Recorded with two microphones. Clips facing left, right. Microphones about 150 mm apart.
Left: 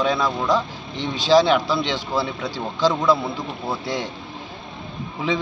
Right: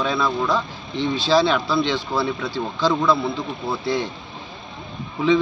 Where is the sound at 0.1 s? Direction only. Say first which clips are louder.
Left 1 dB; 15° left (ahead or behind).